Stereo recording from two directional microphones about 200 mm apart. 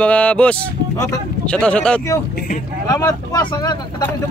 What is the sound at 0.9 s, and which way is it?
Speech, 15° left (ahead or behind).